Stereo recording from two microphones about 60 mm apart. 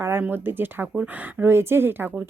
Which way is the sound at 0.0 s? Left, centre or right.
Right.